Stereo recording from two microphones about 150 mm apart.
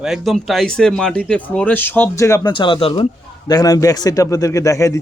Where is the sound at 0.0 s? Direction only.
Centre (ahead or behind); by 2.5 s 20° left (ahead or behind).